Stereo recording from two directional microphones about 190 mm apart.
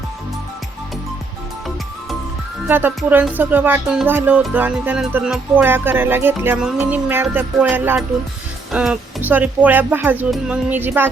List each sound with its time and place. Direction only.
2.6 s speech: 10° right (ahead or behind)
3.0 s music: 5° right (ahead or behind)